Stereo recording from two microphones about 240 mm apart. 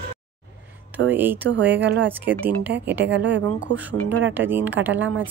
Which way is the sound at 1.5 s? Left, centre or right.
Right.